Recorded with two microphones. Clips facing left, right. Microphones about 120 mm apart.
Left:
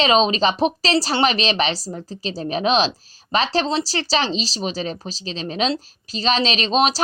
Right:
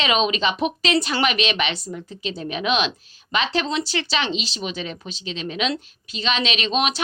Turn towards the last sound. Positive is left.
turn(degrees=35)  # may be behind; listen again after turning